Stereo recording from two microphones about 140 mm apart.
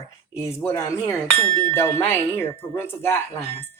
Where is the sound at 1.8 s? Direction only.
20° left (ahead or behind).